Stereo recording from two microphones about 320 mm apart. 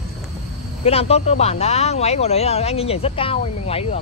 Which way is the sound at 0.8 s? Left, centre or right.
Centre.